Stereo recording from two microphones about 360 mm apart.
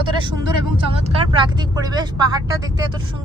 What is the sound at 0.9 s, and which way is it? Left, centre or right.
Speech, centre.